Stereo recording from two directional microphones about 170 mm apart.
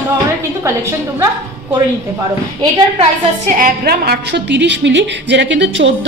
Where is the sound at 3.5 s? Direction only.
55° right (ahead or behind).